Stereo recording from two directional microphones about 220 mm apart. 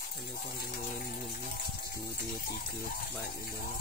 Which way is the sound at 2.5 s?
45° left (ahead or behind).